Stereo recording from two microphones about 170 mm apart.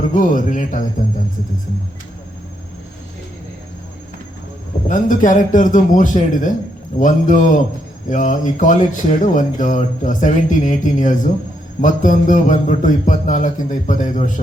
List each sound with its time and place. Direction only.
0.1 s speech: 50° left (ahead or behind)
4.9 s speech: 50° left (ahead or behind)